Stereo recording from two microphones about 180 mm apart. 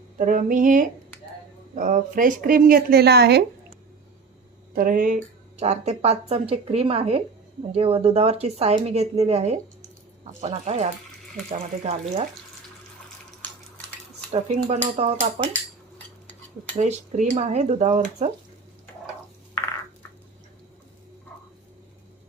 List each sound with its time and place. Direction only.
0.2 s speech: 45° right (ahead or behind); by 3.4 s 65° right (ahead or behind)
4.7 s speech: 50° right (ahead or behind)
14.3 s dishes: 35° right (ahead or behind)
14.7 s speech: 35° right (ahead or behind)
16.7 s speech: 40° right (ahead or behind)